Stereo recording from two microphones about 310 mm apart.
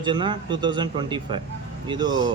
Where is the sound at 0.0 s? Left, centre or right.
Centre.